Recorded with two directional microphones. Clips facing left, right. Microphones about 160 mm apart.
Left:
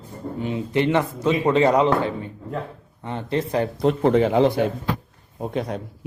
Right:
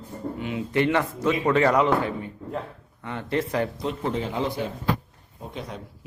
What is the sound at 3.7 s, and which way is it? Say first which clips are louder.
A man's voice: left 10 dB; 65° left (ahead or behind).